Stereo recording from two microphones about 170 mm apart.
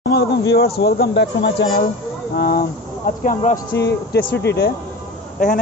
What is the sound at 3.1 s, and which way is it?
Speech, 55° left (ahead or behind).